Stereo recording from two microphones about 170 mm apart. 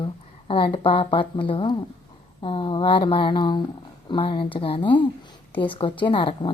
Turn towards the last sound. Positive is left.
turn(degrees=30)  # may be behind; listen again after turning